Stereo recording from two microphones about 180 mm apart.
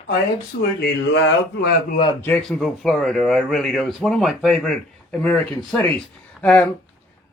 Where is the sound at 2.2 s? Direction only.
5° left (ahead or behind).